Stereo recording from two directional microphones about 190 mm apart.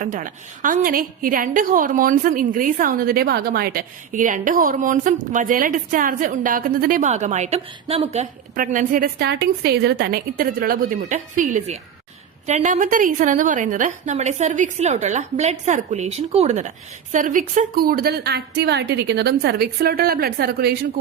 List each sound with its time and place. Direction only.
0.0 s a woman's voice: 45° right (ahead or behind)